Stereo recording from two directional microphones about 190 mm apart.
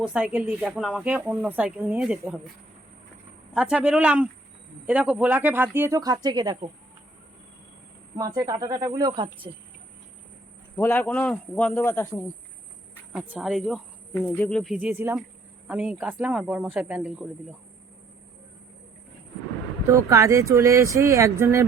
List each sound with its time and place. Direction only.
0.0 s speech: 5° right (ahead or behind)
3.5 s speech: 5° right (ahead or behind); by 6.7 s 20° right (ahead or behind)
8.1 s speech: 20° right (ahead or behind)
10.8 s a man's voice: 10° left (ahead or behind)
13.1 s speech: 5° right (ahead or behind)
19.9 s speech: 15° right (ahead or behind)